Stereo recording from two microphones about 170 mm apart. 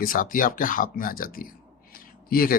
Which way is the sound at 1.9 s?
60° left (ahead or behind).